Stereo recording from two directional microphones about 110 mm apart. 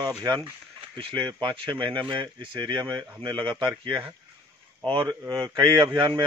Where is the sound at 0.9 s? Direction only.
50° right (ahead or behind).